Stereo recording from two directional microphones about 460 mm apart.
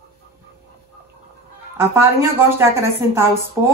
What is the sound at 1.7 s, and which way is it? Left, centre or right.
Speech, centre.